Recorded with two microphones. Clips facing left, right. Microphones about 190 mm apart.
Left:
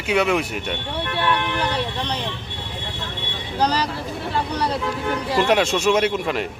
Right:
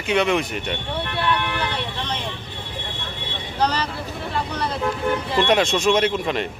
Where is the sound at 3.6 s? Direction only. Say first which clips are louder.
Left 1 dB; 35° left (ahead or behind).